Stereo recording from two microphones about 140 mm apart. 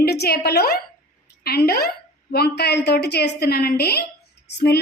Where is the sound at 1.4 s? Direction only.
90° left.